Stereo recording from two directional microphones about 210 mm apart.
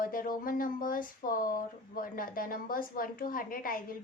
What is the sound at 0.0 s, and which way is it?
Speech, 40° left (ahead or behind).